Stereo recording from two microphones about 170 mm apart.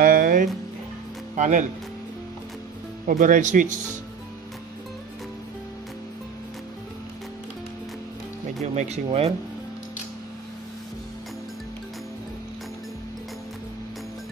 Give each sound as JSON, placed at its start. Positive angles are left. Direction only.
{"t": 0.0, "sound": "music", "side_deg": -60}
{"t": 1.3, "sound": "speech", "side_deg": -45}
{"t": 3.1, "sound": "speech", "side_deg": -50}
{"t": 8.7, "sound": "speech", "side_deg": -40}